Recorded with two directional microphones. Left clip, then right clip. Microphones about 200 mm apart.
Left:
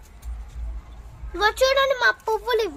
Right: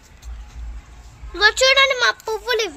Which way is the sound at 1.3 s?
45° left (ahead or behind).